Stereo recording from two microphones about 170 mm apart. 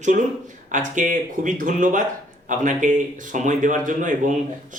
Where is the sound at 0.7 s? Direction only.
50° right (ahead or behind).